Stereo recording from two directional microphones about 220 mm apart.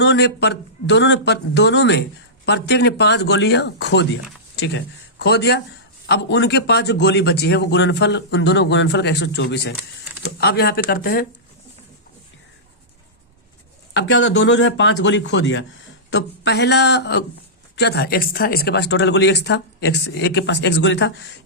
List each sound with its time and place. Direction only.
0.0 s a man's voice: 50° left (ahead or behind)
13.9 s a man's voice: 60° left (ahead or behind)